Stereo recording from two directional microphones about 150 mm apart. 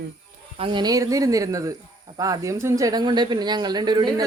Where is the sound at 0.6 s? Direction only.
35° right (ahead or behind).